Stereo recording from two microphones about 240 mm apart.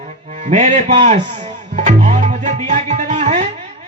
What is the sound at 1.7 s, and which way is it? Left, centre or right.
Music, right.